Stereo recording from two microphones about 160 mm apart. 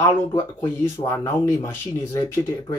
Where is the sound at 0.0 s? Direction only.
20° left (ahead or behind).